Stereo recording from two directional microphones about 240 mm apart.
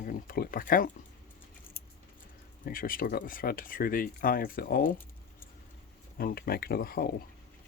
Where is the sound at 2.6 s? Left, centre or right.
Left.